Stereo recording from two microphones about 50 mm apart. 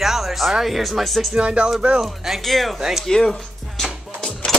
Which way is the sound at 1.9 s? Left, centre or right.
Centre.